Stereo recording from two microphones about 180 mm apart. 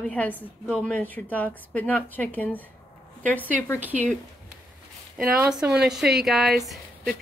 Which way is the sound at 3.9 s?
40° right (ahead or behind).